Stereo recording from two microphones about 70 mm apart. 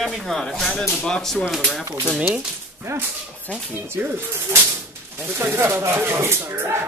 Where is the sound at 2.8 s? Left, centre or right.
Right.